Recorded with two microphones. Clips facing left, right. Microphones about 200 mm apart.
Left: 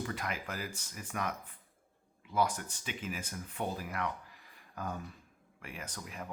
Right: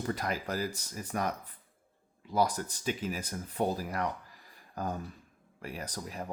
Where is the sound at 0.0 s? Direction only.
40° right (ahead or behind).